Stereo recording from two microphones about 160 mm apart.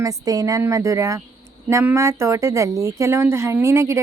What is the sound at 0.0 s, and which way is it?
A woman's voice, 20° right (ahead or behind).